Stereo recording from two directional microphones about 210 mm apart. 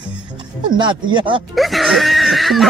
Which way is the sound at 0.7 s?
20° right (ahead or behind).